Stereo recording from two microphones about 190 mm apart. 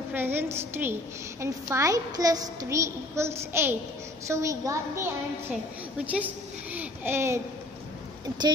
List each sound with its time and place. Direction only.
0.1 s a woman's voice: 10° right (ahead or behind)